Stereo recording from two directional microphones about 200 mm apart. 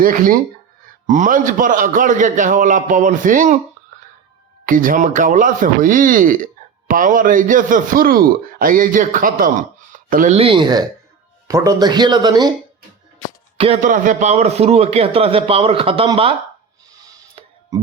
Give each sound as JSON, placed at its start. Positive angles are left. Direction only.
{"t": 0.0, "sound": "a man's voice", "side_deg": -45}
{"t": 4.6, "sound": "a man's voice", "side_deg": -45}
{"t": 13.8, "sound": "a man's voice", "side_deg": -40}